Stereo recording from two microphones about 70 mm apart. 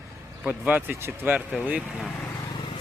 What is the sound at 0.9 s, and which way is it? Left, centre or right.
Speech, right.